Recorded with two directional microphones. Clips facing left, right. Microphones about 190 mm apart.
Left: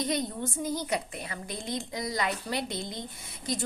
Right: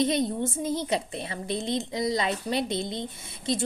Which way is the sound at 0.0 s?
25° right (ahead or behind).